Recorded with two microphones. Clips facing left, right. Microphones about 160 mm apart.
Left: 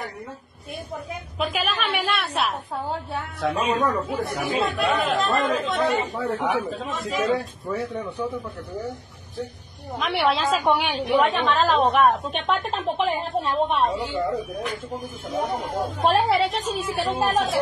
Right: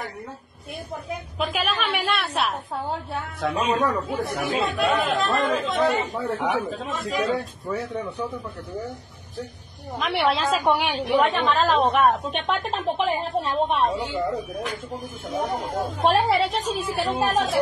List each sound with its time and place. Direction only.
1.4 s a woman's voice: centre (ahead or behind)
9.9 s a woman's voice: centre (ahead or behind)